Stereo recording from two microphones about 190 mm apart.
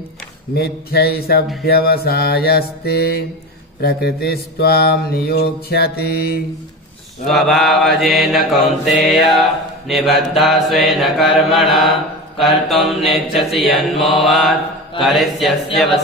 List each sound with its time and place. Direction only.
0.6 s mantra: 55° left (ahead or behind)
7.2 s mantra: centre (ahead or behind)